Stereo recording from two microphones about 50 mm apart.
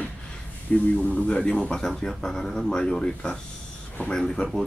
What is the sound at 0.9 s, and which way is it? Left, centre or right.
Speech, left.